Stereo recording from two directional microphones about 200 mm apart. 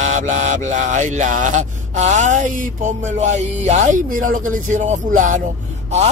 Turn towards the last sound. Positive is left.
turn(degrees=-35)  # may be behind; listen again after turning